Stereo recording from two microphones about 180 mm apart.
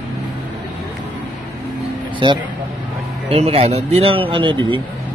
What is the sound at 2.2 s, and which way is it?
Speech, 25° right (ahead or behind).